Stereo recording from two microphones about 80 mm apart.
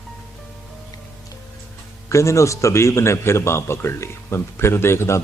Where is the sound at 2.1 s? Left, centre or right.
Left.